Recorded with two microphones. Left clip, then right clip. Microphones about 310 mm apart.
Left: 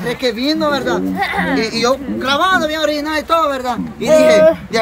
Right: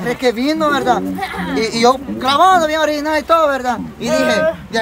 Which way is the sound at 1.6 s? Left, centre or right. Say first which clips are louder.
Right 3 dB; centre.